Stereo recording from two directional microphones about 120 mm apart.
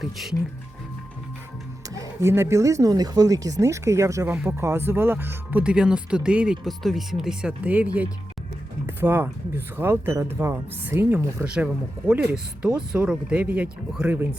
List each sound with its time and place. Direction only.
0.0 s speech: centre (ahead or behind)
1.9 s speech: 25° right (ahead or behind)
11.4 s speech: 10° right (ahead or behind)